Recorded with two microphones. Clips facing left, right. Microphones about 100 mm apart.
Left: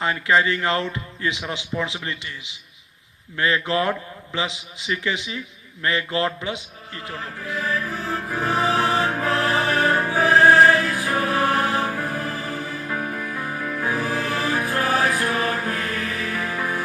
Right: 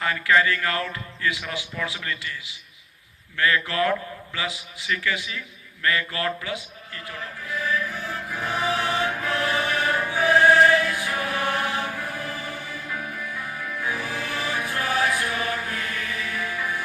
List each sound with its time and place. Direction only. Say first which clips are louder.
0.0 s a man's voice: left 1 dB; 25° left (ahead or behind)
7.6 s music: left 1 dB; 40° left (ahead or behind)